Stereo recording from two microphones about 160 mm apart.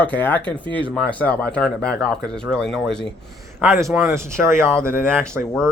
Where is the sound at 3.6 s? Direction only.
10° right (ahead or behind).